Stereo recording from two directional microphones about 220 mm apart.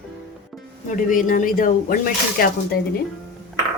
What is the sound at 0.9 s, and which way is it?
Speech, 35° left (ahead or behind).